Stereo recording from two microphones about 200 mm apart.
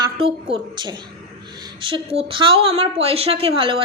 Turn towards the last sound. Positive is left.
turn(degrees=-30)  # may be behind; listen again after turning